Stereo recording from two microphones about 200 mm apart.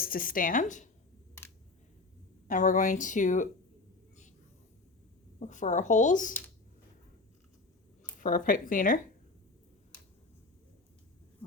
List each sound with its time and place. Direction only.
0.0 s a woman's voice: 45° left (ahead or behind)
2.5 s speech: 40° left (ahead or behind)
5.4 s speech: 40° left (ahead or behind)
8.2 s a woman's voice: 45° left (ahead or behind)